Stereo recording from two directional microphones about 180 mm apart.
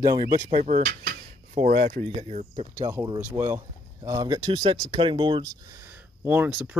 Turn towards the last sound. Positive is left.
turn(degrees=-10)  # may be behind; listen again after turning